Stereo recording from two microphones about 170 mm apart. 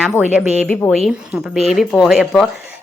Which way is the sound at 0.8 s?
10° left (ahead or behind).